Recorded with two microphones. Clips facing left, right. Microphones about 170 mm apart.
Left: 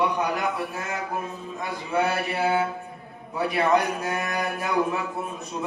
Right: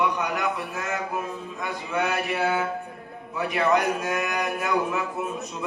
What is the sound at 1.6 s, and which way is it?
Speech, 30° left (ahead or behind).